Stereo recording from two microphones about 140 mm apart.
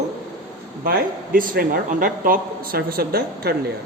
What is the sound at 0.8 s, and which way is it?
Speech, 90° right.